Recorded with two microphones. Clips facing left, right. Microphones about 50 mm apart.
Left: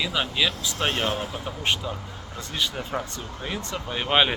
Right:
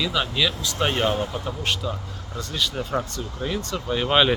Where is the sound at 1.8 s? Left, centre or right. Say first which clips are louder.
Right 2 dB; left.